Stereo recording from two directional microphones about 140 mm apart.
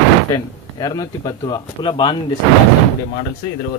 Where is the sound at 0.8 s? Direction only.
30° left (ahead or behind).